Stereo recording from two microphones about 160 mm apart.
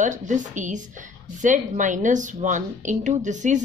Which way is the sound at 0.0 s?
50° right (ahead or behind).